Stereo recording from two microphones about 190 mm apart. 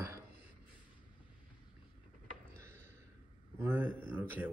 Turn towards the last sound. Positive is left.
turn(degrees=-10)  # may be behind; listen again after turning